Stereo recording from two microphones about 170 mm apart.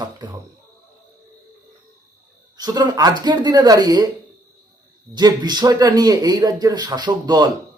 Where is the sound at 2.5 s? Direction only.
25° right (ahead or behind).